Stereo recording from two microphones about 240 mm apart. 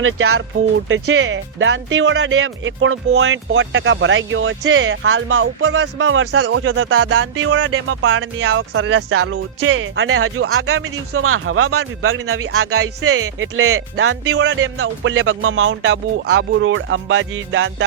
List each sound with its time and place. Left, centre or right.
0.0 s speech: right